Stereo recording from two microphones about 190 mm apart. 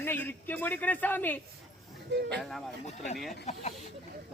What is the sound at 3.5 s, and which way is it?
Speech, 35° left (ahead or behind).